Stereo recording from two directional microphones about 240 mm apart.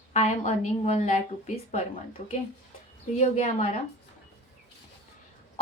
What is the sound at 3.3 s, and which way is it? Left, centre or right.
Speech, left.